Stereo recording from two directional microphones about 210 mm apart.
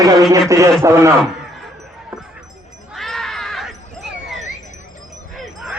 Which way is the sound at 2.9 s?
Centre (ahead or behind).